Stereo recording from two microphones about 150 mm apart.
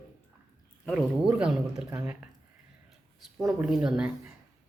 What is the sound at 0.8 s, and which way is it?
Speech, 5° right (ahead or behind).